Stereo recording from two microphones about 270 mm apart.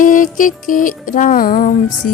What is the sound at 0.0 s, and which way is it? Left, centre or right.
Music, left.